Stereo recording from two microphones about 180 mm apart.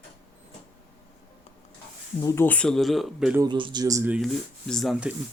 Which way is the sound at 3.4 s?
25° right (ahead or behind).